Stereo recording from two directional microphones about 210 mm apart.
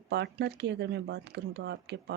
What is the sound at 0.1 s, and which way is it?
Speech, 55° right (ahead or behind).